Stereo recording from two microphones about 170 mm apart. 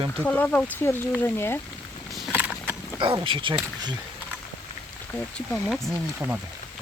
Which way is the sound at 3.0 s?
30° right (ahead or behind).